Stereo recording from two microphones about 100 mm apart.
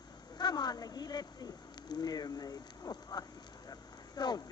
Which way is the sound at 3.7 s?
45° left (ahead or behind).